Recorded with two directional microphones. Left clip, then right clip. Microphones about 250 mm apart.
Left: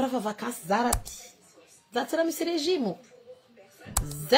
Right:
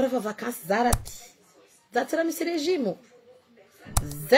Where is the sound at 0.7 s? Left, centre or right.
Centre.